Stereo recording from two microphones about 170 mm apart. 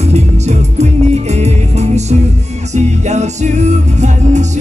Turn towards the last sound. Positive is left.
turn(degrees=-45)  # may be behind; listen again after turning